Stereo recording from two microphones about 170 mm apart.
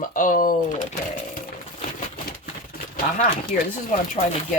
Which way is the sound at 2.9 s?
60° left (ahead or behind).